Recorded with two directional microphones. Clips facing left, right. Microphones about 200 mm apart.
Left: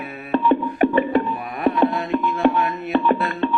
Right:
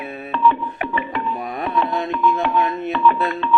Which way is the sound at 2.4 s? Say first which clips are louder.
Left 2 dB; 50° left (ahead or behind).